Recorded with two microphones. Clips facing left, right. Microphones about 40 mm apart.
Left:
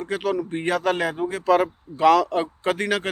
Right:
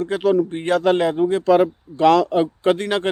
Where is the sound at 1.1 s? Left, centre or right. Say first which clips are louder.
Right 8 dB; right.